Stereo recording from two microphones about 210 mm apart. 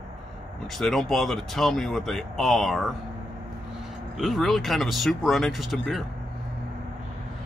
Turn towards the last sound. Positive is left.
turn(degrees=0)  # may be behind; listen again after turning